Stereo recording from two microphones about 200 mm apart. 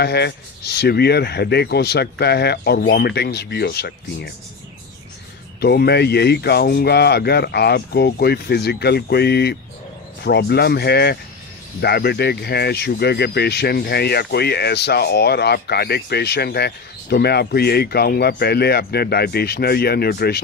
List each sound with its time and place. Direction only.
0.0 s speech: 55° left (ahead or behind)
5.5 s speech: 55° left (ahead or behind)